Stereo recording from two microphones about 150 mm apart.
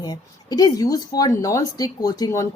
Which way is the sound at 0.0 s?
25° left (ahead or behind).